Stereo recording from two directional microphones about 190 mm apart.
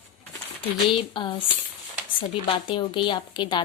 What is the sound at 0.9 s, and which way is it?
Speech, 25° left (ahead or behind).